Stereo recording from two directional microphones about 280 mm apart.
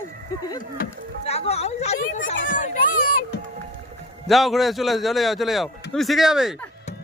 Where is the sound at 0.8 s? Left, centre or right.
Left.